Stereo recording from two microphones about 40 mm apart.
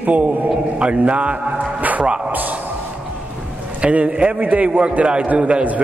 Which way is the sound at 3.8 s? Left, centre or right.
Right.